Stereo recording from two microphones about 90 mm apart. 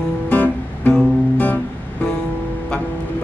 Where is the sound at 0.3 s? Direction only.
15° left (ahead or behind).